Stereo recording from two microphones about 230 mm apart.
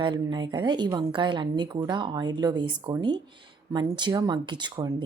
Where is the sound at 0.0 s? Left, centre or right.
Centre.